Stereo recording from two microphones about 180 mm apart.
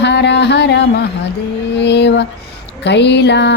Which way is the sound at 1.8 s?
70° left (ahead or behind).